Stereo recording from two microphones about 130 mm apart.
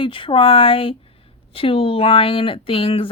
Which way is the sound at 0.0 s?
40° left (ahead or behind).